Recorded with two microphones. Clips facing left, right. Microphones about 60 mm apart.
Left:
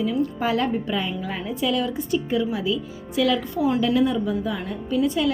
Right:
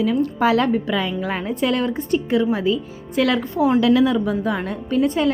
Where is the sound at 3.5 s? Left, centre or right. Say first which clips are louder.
Right 4 dB; right.